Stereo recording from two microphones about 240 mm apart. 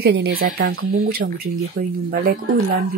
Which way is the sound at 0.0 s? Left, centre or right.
Right.